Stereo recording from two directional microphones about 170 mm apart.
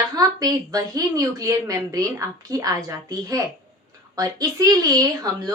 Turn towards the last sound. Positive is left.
turn(degrees=-20)  # may be behind; listen again after turning